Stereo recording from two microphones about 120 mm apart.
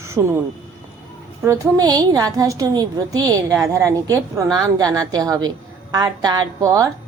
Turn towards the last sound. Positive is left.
turn(degrees=-30)  # may be behind; listen again after turning